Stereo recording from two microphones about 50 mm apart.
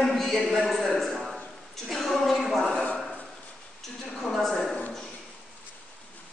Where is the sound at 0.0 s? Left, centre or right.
Centre.